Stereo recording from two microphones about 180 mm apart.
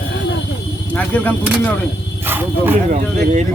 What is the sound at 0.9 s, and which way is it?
Speech, 10° left (ahead or behind).